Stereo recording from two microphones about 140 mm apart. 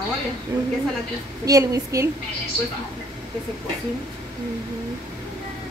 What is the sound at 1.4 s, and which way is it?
Speech, 25° right (ahead or behind).